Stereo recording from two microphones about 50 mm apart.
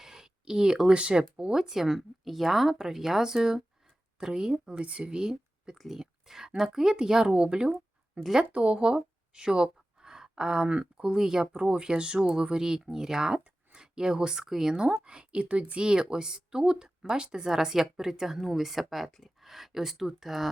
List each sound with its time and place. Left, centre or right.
0.0 s a sound: centre
0.9 s speech: centre
1.5 s a woman's voice: centre
5.7 s speech: centre
6.0 s a woman's voice: centre